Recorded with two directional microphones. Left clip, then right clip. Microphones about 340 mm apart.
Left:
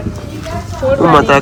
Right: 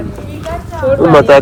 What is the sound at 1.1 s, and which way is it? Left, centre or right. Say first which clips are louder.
Speech: right 3 dB; centre.